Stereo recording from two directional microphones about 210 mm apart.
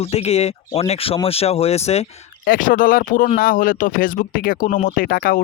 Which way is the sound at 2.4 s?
40° left (ahead or behind).